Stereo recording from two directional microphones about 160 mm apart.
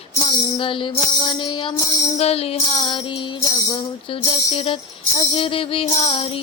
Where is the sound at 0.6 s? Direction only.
35° left (ahead or behind).